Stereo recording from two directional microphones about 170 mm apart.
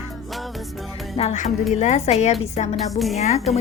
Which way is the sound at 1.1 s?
40° left (ahead or behind).